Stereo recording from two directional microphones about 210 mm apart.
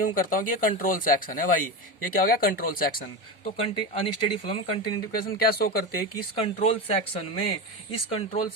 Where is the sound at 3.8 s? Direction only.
25° left (ahead or behind).